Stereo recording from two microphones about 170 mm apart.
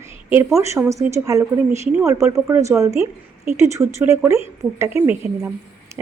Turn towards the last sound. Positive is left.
turn(degrees=-15)  # may be behind; listen again after turning